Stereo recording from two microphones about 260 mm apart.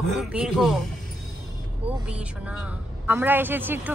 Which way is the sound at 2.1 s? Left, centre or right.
Centre.